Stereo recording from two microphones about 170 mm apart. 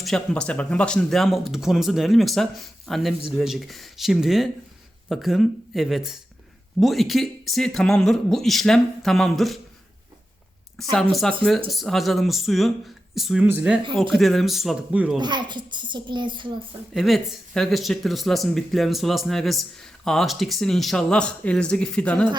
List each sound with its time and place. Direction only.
0.0 s speech: 5° left (ahead or behind)
10.9 s speech: 5° left (ahead or behind)
14.1 s speech: centre (ahead or behind)
15.2 s a child's voice: 25° right (ahead or behind)
16.9 s speech: centre (ahead or behind)